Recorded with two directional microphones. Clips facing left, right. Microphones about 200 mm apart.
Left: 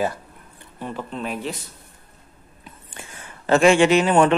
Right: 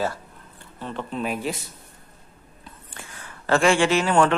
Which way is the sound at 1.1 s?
10° right (ahead or behind).